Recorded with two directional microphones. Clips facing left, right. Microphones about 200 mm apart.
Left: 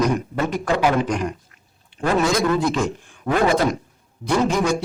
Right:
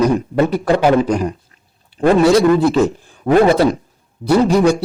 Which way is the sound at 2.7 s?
35° right (ahead or behind).